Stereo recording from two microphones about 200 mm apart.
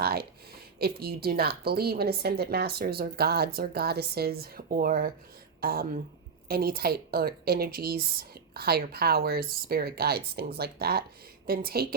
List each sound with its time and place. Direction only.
0.0 s a woman's voice: 50° right (ahead or behind)